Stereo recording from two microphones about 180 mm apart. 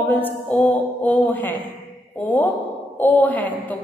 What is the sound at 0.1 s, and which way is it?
A woman's voice, 10° left (ahead or behind).